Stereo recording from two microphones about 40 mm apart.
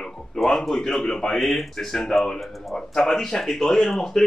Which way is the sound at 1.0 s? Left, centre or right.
Centre.